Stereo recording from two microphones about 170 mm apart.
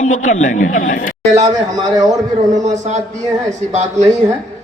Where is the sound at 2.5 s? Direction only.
45° right (ahead or behind).